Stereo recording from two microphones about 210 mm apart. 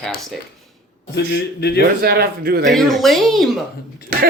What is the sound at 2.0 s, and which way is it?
Speech, 45° right (ahead or behind).